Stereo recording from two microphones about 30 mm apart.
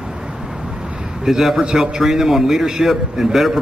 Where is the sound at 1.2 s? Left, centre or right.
Centre.